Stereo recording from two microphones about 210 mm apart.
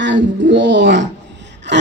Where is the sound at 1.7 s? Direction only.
55° right (ahead or behind).